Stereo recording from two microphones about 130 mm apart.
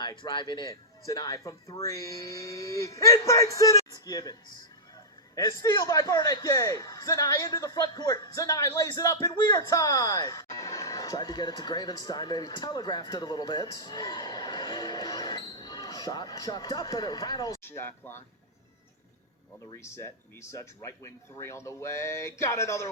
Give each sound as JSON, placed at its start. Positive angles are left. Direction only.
{"t": 0.0, "sound": "a man's voice", "side_deg": 35}
{"t": 19.8, "sound": "speech", "side_deg": 20}